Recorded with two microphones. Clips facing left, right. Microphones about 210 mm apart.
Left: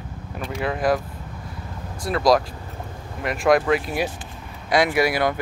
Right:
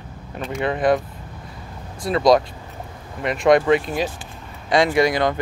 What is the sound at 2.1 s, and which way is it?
Speech, centre (ahead or behind).